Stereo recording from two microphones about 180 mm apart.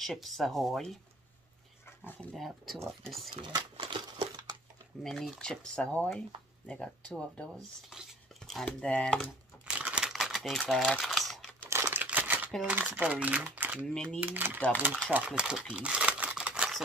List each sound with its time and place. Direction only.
0.0 s speech: centre (ahead or behind)
2.3 s speech: centre (ahead or behind)
3.3 s speech: 25° right (ahead or behind)
5.0 s speech: centre (ahead or behind)
9.8 s typing: 5° right (ahead or behind)
11.7 s a sound: 15° right (ahead or behind)
12.5 s speech: 5° right (ahead or behind)
13.9 s speech: 5° left (ahead or behind)
14.2 s speech: 10° right (ahead or behind)
15.1 s crumpling: 5° right (ahead or behind)